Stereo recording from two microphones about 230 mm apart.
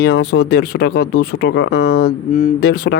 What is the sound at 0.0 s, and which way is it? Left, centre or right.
Speech, left.